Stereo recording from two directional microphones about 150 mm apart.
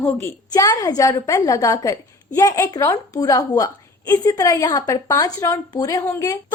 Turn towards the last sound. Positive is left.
turn(degrees=20)  # may be behind; listen again after turning